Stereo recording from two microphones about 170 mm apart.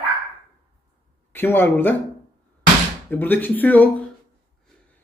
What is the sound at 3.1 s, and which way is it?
Speech, 10° left (ahead or behind).